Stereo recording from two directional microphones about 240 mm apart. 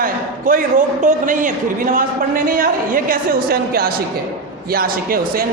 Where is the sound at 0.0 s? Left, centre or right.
Right.